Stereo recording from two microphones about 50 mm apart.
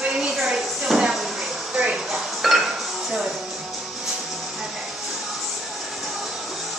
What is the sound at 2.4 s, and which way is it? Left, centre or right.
Dishes, centre.